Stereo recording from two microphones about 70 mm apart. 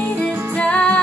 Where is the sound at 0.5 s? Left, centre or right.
Centre.